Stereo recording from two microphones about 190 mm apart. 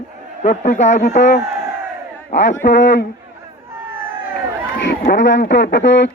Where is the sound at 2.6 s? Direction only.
45° left (ahead or behind).